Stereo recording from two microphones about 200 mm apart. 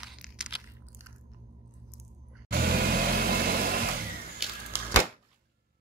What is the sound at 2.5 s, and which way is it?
Vehicle, 50° right (ahead or behind).